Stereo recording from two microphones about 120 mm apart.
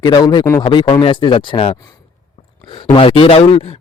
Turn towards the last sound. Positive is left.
turn(degrees=55)  # may be behind; listen again after turning